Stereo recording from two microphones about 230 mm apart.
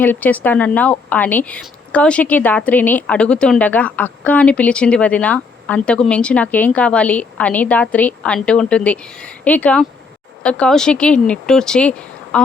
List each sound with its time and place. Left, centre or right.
0.0 s a woman's voice: centre